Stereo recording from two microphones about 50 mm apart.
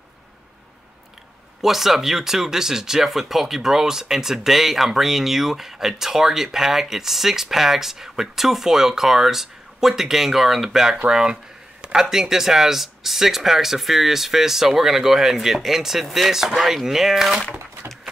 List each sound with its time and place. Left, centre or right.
1.6 s speech: centre